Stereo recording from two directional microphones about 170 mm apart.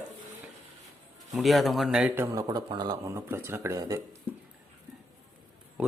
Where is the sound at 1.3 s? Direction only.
Centre (ahead or behind); by 4.0 s 20° right (ahead or behind).